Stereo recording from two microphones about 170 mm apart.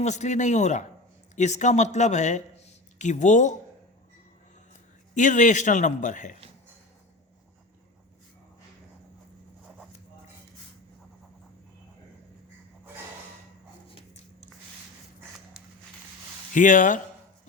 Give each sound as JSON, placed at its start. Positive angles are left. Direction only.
{"t": 0.0, "sound": "a man's voice", "side_deg": 40}
{"t": 5.1, "sound": "a man's voice", "side_deg": 45}
{"t": 15.6, "sound": "a sound", "side_deg": 0}
{"t": 16.6, "sound": "a man's voice", "side_deg": 50}